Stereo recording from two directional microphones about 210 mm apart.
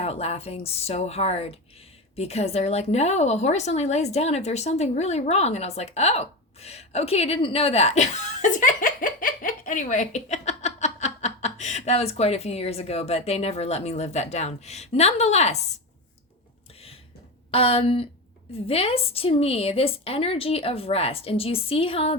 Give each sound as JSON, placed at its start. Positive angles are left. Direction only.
{"t": 0.0, "sound": "a woman's voice", "side_deg": 30}
{"t": 17.5, "sound": "a woman's voice", "side_deg": 25}